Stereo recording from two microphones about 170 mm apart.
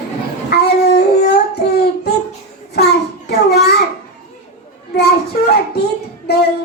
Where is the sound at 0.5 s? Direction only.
75° left (ahead or behind).